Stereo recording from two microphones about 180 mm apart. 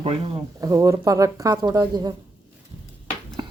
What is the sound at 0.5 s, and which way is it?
Speech, 20° right (ahead or behind).